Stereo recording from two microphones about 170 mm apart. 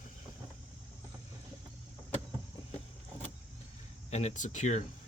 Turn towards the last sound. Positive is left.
turn(degrees=45)  # may be behind; listen again after turning